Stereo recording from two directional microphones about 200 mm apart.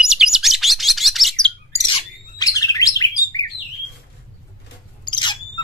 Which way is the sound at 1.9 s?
20° left (ahead or behind).